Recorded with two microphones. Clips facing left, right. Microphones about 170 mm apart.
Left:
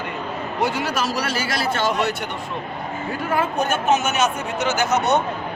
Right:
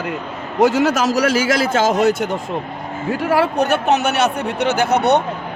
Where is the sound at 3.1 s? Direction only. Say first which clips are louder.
Right 6 dB; 85° right; by 5.2 s 65° right (ahead or behind).